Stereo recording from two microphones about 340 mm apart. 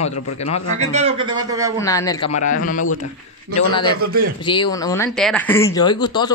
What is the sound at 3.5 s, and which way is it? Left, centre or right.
Speech, centre.